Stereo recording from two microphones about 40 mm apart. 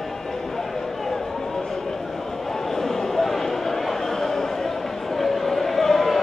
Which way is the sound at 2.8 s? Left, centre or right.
Centre.